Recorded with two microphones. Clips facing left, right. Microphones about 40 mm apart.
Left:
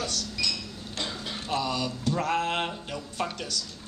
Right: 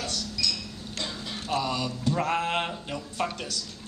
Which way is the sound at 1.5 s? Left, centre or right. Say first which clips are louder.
Right 1 dB; centre.